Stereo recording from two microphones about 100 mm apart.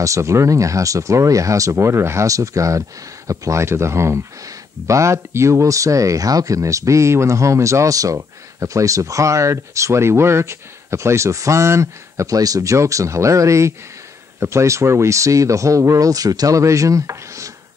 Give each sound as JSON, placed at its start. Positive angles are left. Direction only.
{"t": 0.0, "sound": "speech", "side_deg": -30}